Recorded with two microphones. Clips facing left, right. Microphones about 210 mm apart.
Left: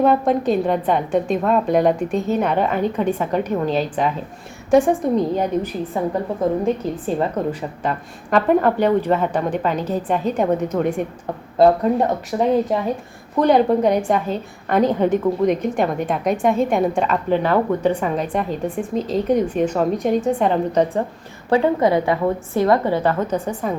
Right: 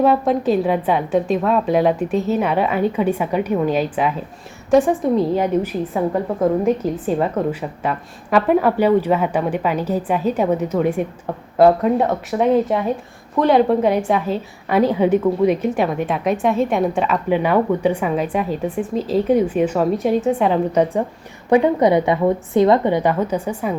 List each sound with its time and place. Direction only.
0.0 s a woman's voice: 5° right (ahead or behind)
6.8 s a woman's voice: 40° right (ahead or behind)
7.8 s a woman's voice: 5° right (ahead or behind)
21.5 s a woman's voice: 15° right (ahead or behind)